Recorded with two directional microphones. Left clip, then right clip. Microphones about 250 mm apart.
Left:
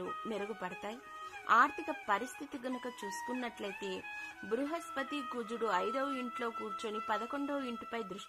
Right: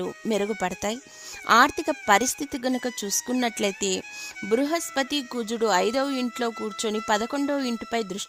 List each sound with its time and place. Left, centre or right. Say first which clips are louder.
0.0 s a woman's voice: right 12 dB; right